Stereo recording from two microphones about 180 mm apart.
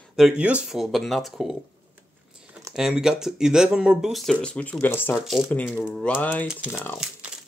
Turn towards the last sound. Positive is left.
turn(degrees=10)  # may be behind; listen again after turning